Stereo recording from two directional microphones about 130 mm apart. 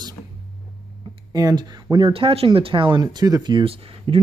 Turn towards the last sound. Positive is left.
turn(degrees=-45)  # may be behind; listen again after turning